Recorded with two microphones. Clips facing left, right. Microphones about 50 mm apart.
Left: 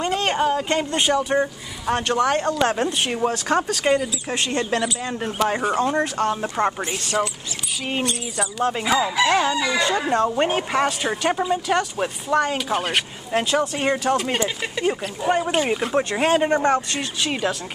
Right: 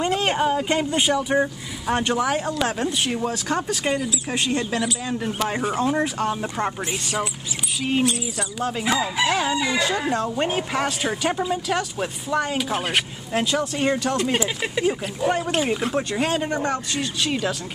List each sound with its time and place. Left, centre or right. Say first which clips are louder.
0.0 s a woman's voice: even; centre
3.0 s a woman's voice: left 2 dB; centre
10.0 s a woman's voice: left 3 dB; centre
14.3 s a woman's voice: right 1 dB; centre
16.1 s speech: left 5 dB; left
17.0 s speech: even; centre